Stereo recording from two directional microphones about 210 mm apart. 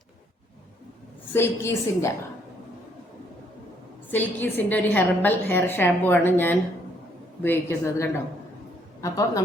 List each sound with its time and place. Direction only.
1.3 s a woman's voice: 10° left (ahead or behind)
4.1 s a woman's voice: 10° left (ahead or behind)